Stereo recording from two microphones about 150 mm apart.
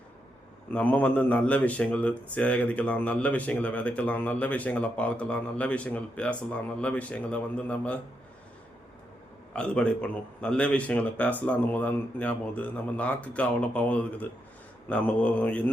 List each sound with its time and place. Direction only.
0.7 s speech: 10° left (ahead or behind)
9.5 s speech: 5° left (ahead or behind)